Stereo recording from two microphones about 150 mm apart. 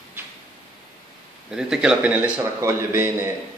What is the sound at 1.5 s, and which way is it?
A man's voice, 5° right (ahead or behind).